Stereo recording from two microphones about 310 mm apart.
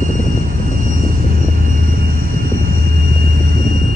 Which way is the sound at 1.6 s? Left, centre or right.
Right.